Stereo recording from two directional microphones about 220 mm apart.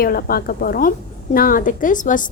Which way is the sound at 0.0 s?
45° left (ahead or behind).